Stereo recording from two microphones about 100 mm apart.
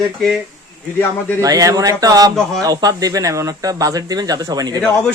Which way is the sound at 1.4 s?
35° right (ahead or behind).